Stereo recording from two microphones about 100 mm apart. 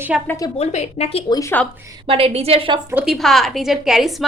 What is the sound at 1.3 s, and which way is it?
Speech, 35° left (ahead or behind).